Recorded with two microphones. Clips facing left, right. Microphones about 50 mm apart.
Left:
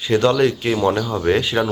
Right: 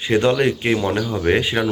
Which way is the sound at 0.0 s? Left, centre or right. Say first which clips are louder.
Left 1 dB; right.